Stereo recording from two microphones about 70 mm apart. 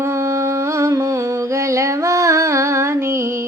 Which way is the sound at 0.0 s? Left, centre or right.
Right.